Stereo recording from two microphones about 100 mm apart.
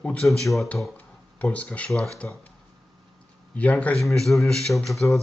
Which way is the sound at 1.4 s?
15° left (ahead or behind).